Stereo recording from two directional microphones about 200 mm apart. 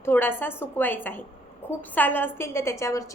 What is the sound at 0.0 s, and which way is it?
A woman's voice, 10° left (ahead or behind).